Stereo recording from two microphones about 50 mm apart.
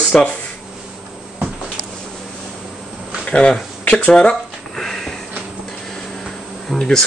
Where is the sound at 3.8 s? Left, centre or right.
Left.